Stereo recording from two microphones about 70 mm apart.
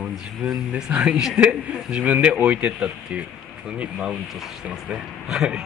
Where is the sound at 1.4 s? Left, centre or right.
Centre.